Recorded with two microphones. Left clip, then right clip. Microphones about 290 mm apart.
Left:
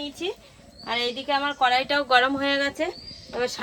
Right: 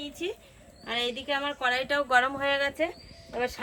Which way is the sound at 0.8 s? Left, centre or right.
Centre.